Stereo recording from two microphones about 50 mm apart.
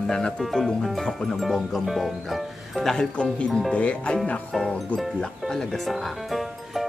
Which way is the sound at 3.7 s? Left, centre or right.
Left.